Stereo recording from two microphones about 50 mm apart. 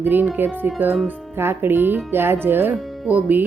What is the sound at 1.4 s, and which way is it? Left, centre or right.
Speech, right.